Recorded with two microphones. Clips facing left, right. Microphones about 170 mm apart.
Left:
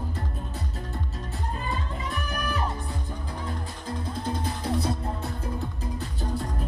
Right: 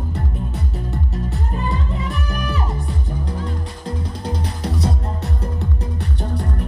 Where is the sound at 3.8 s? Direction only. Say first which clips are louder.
Right 3 dB; 75° right (ahead or behind).